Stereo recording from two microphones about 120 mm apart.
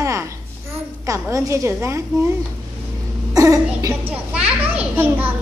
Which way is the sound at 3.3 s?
30° right (ahead or behind).